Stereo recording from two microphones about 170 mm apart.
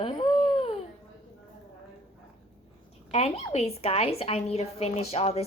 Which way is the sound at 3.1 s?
40° left (ahead or behind).